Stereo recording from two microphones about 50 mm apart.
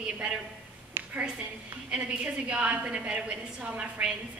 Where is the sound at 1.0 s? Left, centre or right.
Right.